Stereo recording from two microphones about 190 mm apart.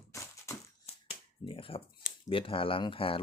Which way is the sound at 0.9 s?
30° left (ahead or behind).